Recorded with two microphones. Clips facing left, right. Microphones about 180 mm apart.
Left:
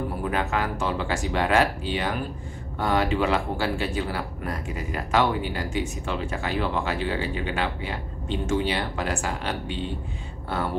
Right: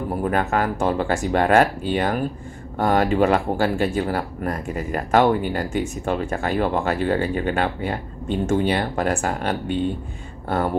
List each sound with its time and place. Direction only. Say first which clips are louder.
0.2 s speech: right 6 dB; 50° right (ahead or behind)